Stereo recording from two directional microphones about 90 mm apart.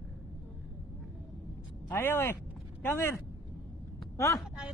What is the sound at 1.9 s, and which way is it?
Speech, 25° left (ahead or behind).